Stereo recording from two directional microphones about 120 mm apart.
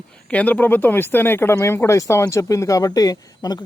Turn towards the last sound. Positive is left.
turn(degrees=30)  # may be behind; listen again after turning